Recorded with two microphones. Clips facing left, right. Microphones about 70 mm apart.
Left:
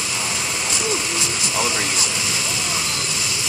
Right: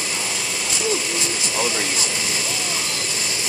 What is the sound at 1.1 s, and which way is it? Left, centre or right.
Speech, right.